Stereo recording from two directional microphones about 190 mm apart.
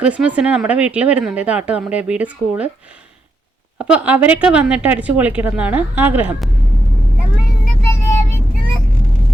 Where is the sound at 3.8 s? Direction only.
5° right (ahead or behind).